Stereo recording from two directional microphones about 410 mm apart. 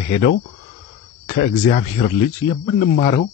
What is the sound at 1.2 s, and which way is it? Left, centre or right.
Speech, centre.